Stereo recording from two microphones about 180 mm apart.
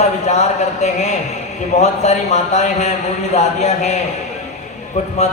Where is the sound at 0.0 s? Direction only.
40° left (ahead or behind).